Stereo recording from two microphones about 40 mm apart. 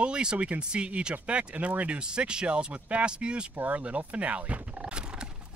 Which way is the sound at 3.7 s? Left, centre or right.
Right.